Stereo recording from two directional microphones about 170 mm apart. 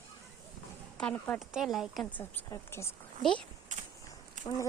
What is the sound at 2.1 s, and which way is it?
Speech, 10° left (ahead or behind).